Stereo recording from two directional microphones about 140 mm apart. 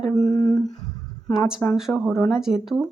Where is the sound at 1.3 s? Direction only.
5° right (ahead or behind).